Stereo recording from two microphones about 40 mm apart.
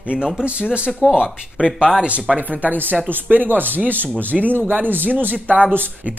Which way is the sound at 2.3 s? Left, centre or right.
Right.